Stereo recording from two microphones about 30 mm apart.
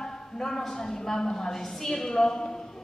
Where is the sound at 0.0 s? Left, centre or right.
Centre.